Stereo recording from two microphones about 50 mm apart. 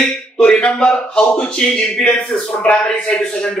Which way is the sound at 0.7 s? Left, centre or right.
Centre.